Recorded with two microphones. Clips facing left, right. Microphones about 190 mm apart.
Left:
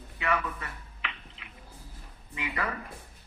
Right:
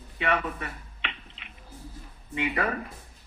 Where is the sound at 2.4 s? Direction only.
30° right (ahead or behind).